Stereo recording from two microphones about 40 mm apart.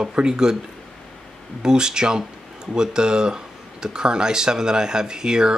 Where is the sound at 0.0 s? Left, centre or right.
Centre.